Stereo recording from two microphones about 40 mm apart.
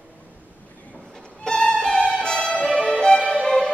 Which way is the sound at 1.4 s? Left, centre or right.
Left.